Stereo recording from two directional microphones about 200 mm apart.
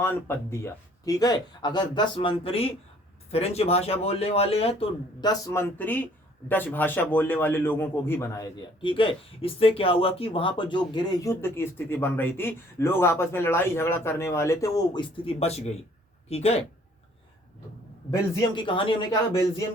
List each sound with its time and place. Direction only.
0.0 s speech: 10° left (ahead or behind); by 16.6 s 30° left (ahead or behind)
18.1 s speech: 20° left (ahead or behind)